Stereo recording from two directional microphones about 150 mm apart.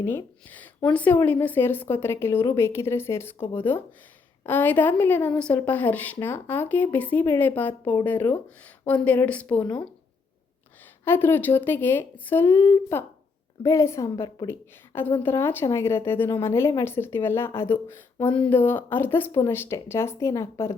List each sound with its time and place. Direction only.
0.0 s a woman's voice: 15° left (ahead or behind)
11.0 s a woman's voice: 15° left (ahead or behind)